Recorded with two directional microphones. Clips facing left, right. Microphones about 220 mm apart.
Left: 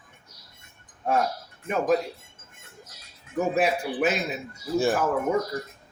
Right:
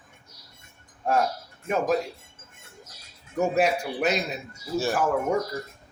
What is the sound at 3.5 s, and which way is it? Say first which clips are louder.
Speech: left 1 dB; 5° left (ahead or behind).